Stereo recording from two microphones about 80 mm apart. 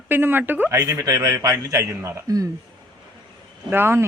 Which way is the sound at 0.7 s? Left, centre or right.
Right.